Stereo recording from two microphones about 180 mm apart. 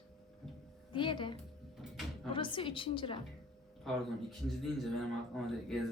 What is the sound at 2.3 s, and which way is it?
Speech, 30° left (ahead or behind).